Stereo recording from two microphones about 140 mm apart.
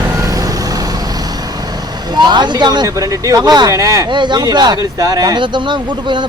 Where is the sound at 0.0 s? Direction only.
25° right (ahead or behind).